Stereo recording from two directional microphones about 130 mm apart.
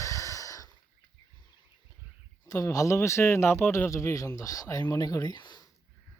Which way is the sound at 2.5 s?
25° left (ahead or behind).